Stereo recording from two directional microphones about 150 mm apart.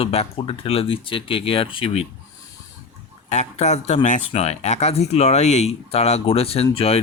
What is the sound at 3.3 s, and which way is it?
Speech, 50° left (ahead or behind).